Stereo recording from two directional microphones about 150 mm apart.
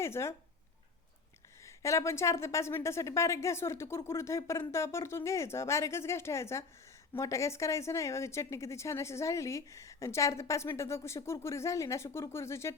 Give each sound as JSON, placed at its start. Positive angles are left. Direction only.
{"t": 0.0, "sound": "a woman's voice", "side_deg": 20}
{"t": 1.6, "sound": "a woman's voice", "side_deg": 20}